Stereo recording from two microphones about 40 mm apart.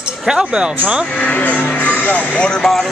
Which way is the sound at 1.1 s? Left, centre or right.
Left.